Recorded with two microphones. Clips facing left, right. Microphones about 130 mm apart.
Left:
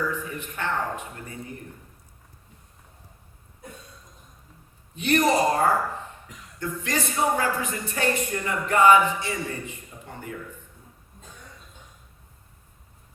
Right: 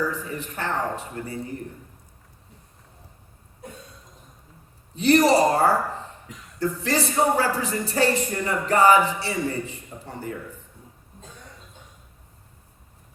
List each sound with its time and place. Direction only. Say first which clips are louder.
0.0 s speech: right 2 dB; 35° right (ahead or behind)
4.9 s speech: right 4 dB; 35° right (ahead or behind)